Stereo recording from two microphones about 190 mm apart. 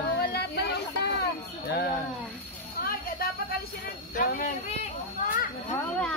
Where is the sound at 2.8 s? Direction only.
50° left (ahead or behind).